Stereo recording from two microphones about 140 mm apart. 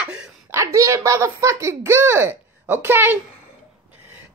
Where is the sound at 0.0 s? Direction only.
5° right (ahead or behind).